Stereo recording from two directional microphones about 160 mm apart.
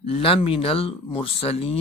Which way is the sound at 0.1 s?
35° left (ahead or behind).